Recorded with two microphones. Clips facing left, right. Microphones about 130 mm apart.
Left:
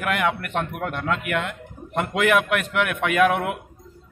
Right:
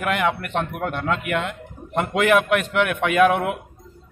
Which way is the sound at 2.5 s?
Centre (ahead or behind).